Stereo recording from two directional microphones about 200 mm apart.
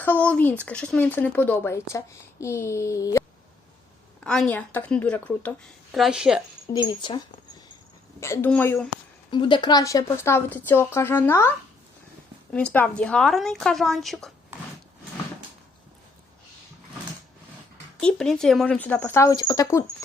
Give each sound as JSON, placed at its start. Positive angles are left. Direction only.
{"t": 0.0, "sound": "a woman's voice", "side_deg": 10}
{"t": 4.2, "sound": "a woman's voice", "side_deg": 5}
{"t": 6.8, "sound": "speech", "side_deg": 25}
{"t": 8.2, "sound": "a woman's voice", "side_deg": 10}
{"t": 9.3, "sound": "a woman's voice", "side_deg": 25}
{"t": 18.0, "sound": "a woman's voice", "side_deg": 5}